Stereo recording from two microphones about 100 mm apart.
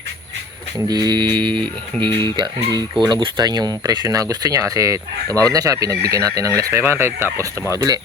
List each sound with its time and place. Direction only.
0.9 s speech: 45° right (ahead or behind)